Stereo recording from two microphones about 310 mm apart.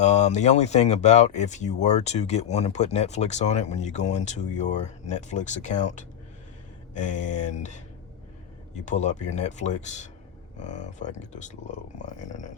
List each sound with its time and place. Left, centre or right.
0.0 s speech: left
8.8 s speech: left